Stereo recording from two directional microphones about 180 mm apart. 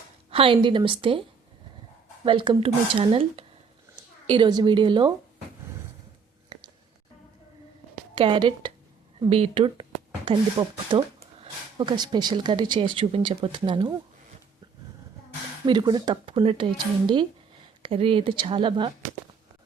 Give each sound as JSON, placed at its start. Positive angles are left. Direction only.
{"t": 0.3, "sound": "speech", "side_deg": -30}
{"t": 2.2, "sound": "speech", "side_deg": -25}
{"t": 6.5, "sound": "a sound", "side_deg": -25}
{"t": 8.1, "sound": "speech", "side_deg": -25}
{"t": 15.6, "sound": "speech", "side_deg": -25}